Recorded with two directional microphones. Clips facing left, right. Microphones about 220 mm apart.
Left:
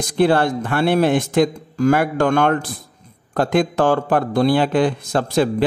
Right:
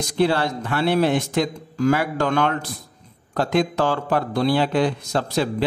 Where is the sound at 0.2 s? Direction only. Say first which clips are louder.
Left 4 dB; 50° left (ahead or behind).